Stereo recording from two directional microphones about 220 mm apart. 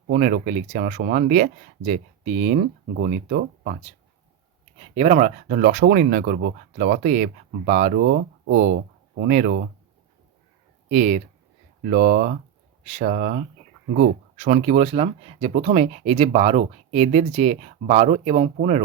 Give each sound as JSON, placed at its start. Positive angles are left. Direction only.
{"t": 0.1, "sound": "speech", "side_deg": -35}
{"t": 4.8, "sound": "speech", "side_deg": -30}
{"t": 10.8, "sound": "speech", "side_deg": -35}